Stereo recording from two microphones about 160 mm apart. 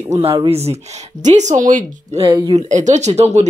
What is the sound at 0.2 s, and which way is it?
Speech, 35° right (ahead or behind).